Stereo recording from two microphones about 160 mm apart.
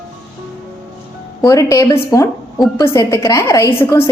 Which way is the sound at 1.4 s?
20° left (ahead or behind).